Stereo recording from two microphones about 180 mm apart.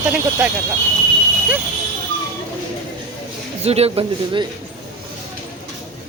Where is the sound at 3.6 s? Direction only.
35° right (ahead or behind).